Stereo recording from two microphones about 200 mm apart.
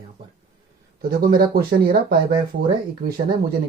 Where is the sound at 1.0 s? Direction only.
50° right (ahead or behind).